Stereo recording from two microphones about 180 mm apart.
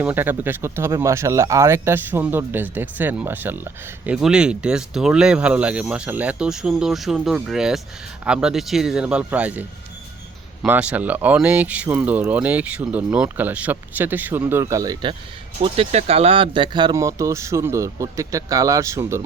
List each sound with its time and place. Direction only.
0.0 s speech: 10° right (ahead or behind)
15.6 s speech: 30° right (ahead or behind); by 19.2 s 15° right (ahead or behind)